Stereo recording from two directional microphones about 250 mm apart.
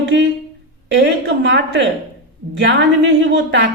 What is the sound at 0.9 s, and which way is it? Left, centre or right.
A woman's voice, right.